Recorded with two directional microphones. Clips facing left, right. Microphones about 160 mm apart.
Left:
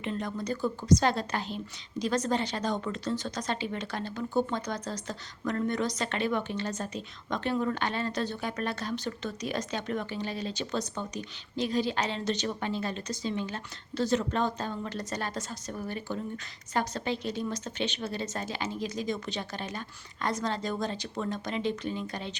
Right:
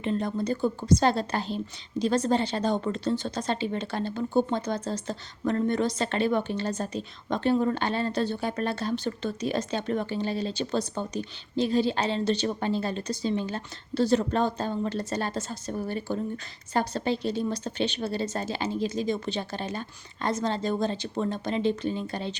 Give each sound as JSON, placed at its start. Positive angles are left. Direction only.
{"t": 0.0, "sound": "a woman's voice", "side_deg": -35}